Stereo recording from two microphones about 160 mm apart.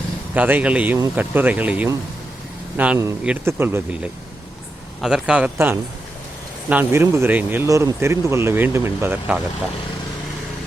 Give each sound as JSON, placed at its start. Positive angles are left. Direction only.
{"t": 0.3, "sound": "speech", "side_deg": -10}